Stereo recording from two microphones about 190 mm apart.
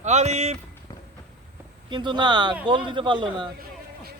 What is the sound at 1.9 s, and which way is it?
A man's voice, 25° right (ahead or behind).